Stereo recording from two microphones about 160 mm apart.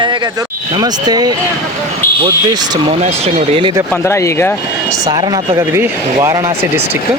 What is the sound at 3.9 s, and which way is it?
Speech, 15° left (ahead or behind).